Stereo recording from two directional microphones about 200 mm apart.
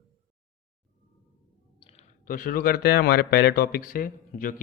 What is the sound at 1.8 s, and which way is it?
Clicking, 30° left (ahead or behind).